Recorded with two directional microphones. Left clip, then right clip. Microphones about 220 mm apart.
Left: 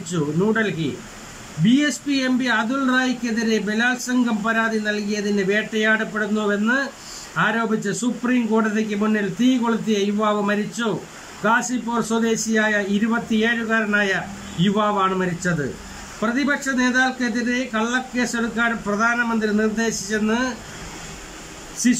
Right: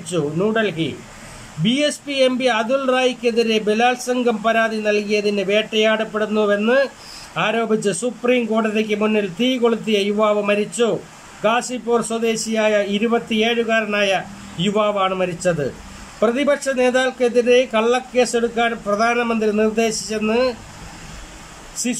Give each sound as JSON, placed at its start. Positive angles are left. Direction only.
{"t": 0.1, "sound": "speech", "side_deg": -5}